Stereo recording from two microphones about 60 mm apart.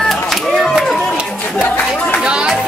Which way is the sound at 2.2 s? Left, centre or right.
Centre.